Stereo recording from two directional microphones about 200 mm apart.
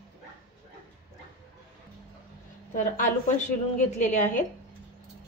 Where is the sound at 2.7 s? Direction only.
40° left (ahead or behind).